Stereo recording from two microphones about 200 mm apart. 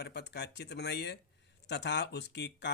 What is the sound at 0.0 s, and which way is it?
Speech, 55° left (ahead or behind).